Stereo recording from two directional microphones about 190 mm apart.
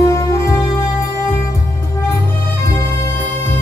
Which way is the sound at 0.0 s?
15° left (ahead or behind).